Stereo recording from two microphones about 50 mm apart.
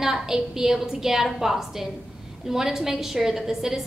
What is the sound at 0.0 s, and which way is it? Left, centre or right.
A woman's voice, centre.